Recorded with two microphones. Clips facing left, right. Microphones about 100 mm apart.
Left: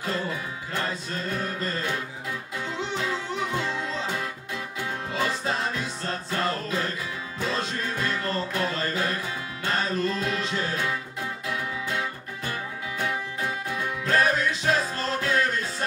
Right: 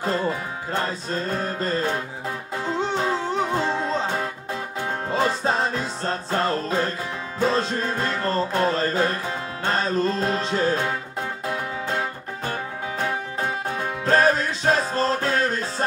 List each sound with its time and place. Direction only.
0.0 s music: 35° right (ahead or behind)